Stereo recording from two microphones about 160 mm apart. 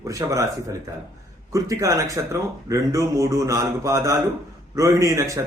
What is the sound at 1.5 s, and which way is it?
A man's voice, 20° right (ahead or behind).